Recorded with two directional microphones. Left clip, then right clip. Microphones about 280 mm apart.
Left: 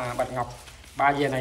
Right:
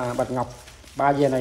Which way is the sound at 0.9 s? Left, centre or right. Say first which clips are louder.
Right 3 dB; centre.